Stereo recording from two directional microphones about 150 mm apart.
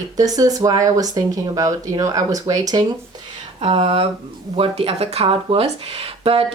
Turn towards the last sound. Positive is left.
turn(degrees=-40)  # may be behind; listen again after turning